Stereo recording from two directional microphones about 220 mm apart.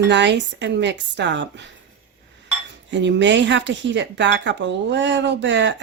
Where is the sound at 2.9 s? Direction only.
55° right (ahead or behind).